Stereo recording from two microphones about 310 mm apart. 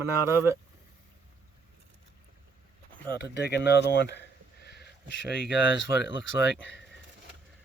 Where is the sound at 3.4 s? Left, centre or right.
Left.